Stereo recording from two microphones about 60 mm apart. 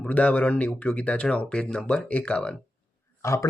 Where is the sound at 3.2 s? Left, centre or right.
Left.